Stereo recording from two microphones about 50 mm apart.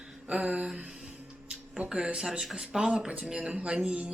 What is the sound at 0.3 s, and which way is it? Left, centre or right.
Speech, right.